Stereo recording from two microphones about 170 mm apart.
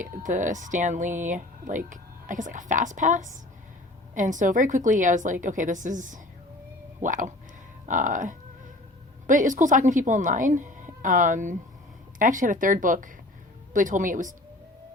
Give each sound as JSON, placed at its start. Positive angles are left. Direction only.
{"t": 0.0, "sound": "speech", "side_deg": -50}